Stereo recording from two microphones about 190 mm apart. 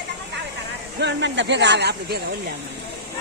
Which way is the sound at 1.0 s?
70° right (ahead or behind).